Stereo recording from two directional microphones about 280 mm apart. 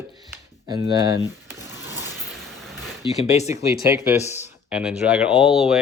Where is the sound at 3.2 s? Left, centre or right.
Left.